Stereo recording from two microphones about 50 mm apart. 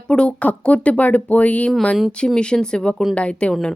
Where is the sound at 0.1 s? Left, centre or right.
Left.